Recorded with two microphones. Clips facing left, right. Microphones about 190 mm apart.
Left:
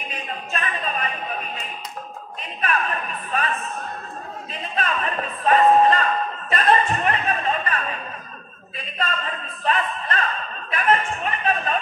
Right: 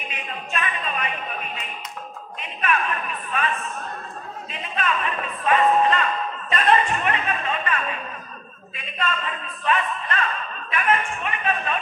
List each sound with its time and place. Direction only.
0.1 s a sound: 40° left (ahead or behind)
2.6 s speech: 35° left (ahead or behind)
4.5 s speech: 35° left (ahead or behind)